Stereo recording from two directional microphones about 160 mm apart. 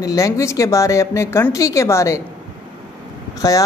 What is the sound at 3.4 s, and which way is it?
Speech, 20° left (ahead or behind).